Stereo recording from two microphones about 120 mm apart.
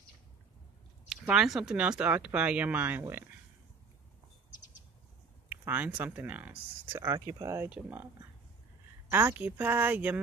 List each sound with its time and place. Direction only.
1.0 s speech: 5° right (ahead or behind)
5.5 s speech: 15° right (ahead or behind)
7.7 s speech: 15° right (ahead or behind)
9.1 s speech: 15° right (ahead or behind)